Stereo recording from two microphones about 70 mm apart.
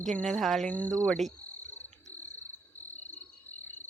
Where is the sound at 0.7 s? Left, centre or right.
Centre.